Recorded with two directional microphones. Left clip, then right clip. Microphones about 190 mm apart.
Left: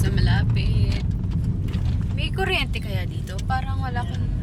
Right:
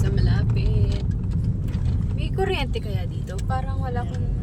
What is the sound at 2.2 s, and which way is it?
Speech, 5° right (ahead or behind).